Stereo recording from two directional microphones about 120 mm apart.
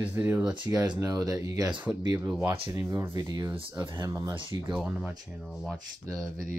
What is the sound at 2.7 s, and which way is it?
Speech, 25° right (ahead or behind).